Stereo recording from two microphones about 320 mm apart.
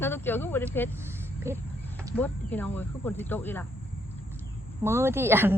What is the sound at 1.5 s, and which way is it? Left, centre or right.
Speech, centre.